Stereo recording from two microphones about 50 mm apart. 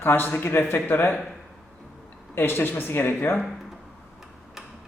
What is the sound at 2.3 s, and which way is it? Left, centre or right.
Speech, left.